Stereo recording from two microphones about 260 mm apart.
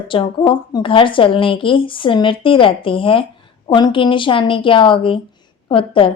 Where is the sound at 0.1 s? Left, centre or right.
Centre.